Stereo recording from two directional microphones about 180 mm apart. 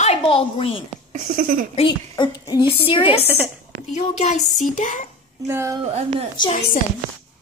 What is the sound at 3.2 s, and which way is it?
Speech, 10° right (ahead or behind).